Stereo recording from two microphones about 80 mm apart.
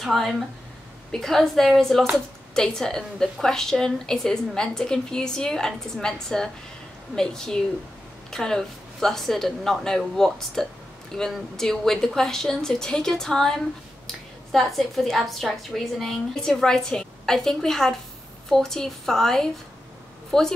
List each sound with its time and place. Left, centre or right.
0.0 s a woman's voice: centre